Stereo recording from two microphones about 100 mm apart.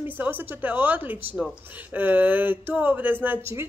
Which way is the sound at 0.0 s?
20° right (ahead or behind).